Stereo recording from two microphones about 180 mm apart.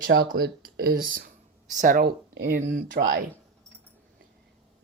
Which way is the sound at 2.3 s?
75° right (ahead or behind).